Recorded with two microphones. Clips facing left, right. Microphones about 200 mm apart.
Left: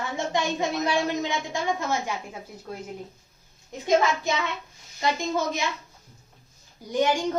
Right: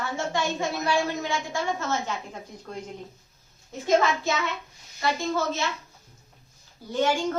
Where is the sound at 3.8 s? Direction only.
15° left (ahead or behind).